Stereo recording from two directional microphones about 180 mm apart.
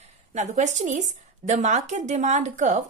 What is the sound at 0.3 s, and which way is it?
A woman's voice, 40° right (ahead or behind).